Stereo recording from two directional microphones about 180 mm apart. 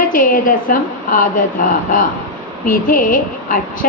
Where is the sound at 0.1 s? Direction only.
50° left (ahead or behind).